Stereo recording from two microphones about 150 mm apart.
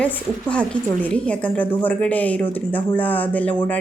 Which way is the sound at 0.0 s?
10° left (ahead or behind).